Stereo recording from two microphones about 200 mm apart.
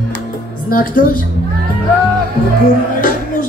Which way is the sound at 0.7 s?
45° left (ahead or behind).